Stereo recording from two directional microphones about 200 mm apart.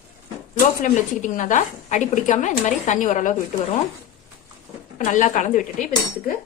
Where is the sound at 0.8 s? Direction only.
40° left (ahead or behind).